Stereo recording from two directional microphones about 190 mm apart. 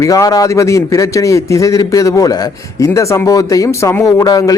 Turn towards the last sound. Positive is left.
turn(degrees=20)  # may be behind; listen again after turning